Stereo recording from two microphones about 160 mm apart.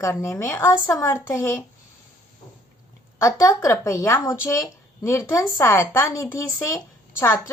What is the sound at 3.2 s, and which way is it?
Speech, 20° left (ahead or behind).